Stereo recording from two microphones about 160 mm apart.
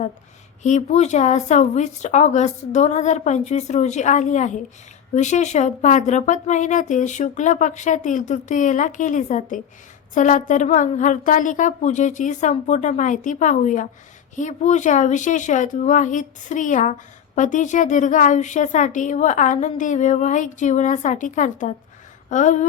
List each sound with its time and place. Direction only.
0.6 s speech: 45° left (ahead or behind)